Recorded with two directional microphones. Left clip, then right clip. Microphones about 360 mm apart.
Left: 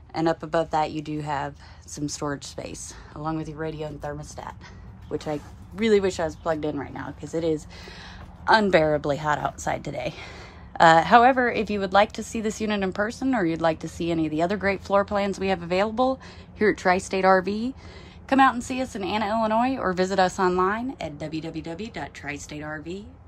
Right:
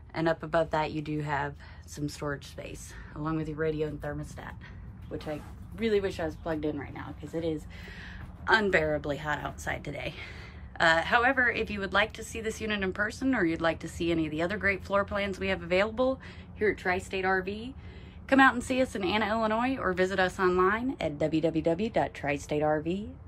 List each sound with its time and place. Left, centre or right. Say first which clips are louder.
0.1 s a woman's voice: left 4 dB; centre
5.1 s a woman's voice: left 7 dB; centre